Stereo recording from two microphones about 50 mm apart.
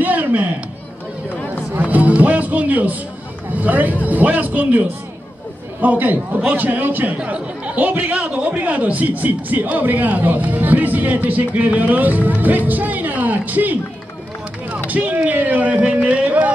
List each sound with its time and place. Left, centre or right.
0.0 s a sound: right
1.8 s music: right
3.5 s speech: right
14.9 s speech: right